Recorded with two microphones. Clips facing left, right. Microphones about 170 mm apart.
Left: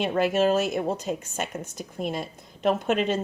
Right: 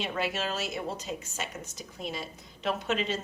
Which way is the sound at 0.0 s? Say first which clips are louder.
Left 10 dB; 50° left (ahead or behind).